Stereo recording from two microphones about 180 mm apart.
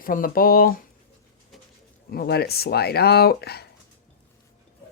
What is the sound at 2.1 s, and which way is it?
Speech, 60° left (ahead or behind).